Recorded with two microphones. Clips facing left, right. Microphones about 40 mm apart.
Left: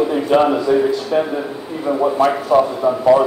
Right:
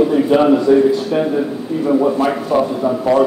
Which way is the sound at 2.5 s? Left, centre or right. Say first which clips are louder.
Left 1 dB; centre.